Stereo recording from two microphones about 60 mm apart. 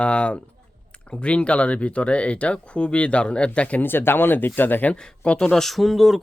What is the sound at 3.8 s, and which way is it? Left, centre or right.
Speech, left.